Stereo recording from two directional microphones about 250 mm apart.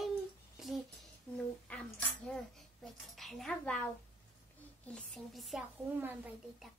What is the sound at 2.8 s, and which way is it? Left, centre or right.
Speech, centre.